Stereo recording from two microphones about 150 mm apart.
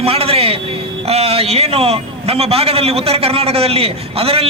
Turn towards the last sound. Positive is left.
turn(degrees=-40)  # may be behind; listen again after turning